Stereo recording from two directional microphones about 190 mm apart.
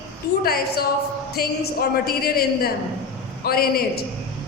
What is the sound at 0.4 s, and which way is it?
A woman's voice, 50° left (ahead or behind).